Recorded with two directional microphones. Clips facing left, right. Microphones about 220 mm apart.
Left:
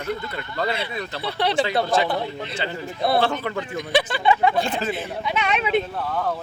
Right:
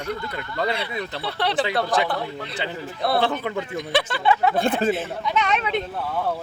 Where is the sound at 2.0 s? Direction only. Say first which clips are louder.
Left 1 dB; 25° left (ahead or behind).